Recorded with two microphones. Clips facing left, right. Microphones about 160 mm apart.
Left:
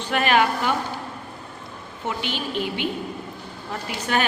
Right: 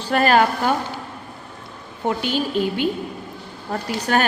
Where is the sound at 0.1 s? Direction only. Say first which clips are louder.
Right 4 dB; 40° right (ahead or behind).